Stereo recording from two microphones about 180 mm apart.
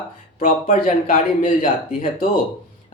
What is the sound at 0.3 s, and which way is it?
Speech, 50° left (ahead or behind).